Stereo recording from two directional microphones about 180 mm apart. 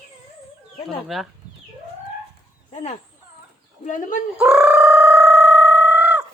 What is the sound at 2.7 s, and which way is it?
Speech, 40° left (ahead or behind).